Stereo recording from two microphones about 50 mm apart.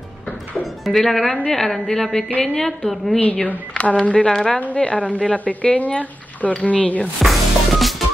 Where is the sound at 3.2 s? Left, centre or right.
Left.